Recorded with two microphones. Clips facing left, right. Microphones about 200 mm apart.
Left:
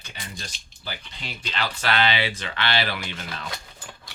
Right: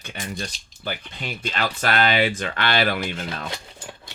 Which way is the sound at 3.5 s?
25° right (ahead or behind).